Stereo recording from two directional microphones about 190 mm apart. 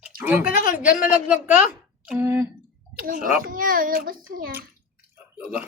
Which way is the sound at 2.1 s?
10° right (ahead or behind).